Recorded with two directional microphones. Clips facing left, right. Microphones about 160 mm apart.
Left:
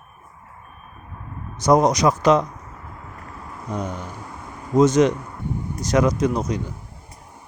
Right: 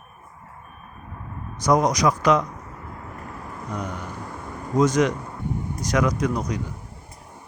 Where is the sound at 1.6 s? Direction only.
25° left (ahead or behind).